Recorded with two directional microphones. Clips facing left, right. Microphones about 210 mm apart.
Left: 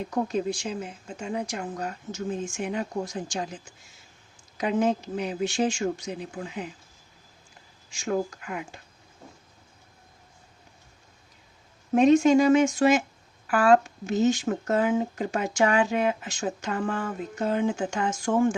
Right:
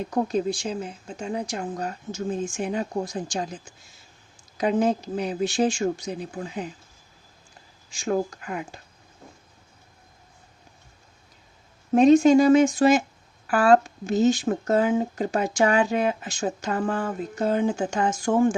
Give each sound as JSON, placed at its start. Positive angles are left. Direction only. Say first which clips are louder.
{"t": 0.1, "sound": "speech", "louder": "right 3 dB", "side_deg": -35}
{"t": 4.5, "sound": "speech", "louder": "right 2 dB", "side_deg": -35}
{"t": 7.9, "sound": "speech", "louder": "right 2 dB", "side_deg": -35}
{"t": 11.9, "sound": "speech", "louder": "right 3 dB", "side_deg": -35}